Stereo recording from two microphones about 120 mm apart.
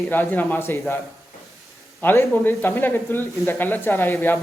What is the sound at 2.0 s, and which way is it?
Speech, 15° left (ahead or behind).